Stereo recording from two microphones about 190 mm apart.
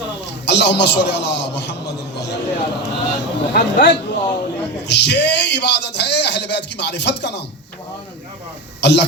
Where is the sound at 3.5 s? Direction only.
55° left (ahead or behind).